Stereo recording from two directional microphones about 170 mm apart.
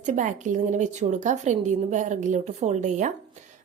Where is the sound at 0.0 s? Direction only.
45° right (ahead or behind).